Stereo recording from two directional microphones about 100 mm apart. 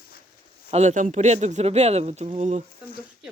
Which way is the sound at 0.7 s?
90° right.